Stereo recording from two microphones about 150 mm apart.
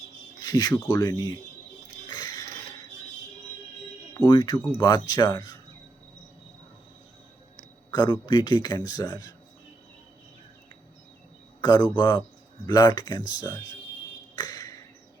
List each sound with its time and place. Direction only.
0.4 s a man's voice: 25° left (ahead or behind)
2.0 s a sound: 30° left (ahead or behind)
4.2 s a man's voice: 30° left (ahead or behind)
7.9 s a man's voice: 30° left (ahead or behind)
11.6 s a man's voice: 30° left (ahead or behind)
14.3 s a sound: 25° left (ahead or behind)